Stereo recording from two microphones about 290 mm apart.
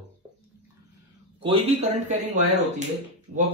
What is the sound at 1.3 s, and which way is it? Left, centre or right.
Speech, centre.